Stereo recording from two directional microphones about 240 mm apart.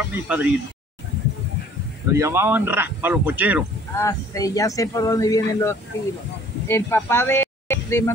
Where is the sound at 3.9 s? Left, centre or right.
Centre.